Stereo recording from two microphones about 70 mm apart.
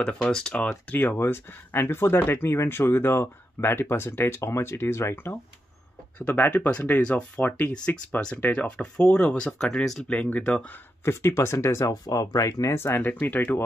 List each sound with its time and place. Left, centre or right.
0.0 s speech: centre
0.9 s speech: left; by 10.0 s centre
10.0 s speech: left
11.1 s speech: left
12.7 s speech: left